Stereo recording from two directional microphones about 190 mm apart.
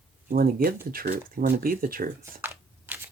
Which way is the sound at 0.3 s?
50° right (ahead or behind).